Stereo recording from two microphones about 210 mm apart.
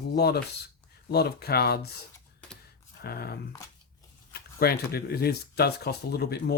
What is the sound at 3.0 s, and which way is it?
Speech, 45° left (ahead or behind).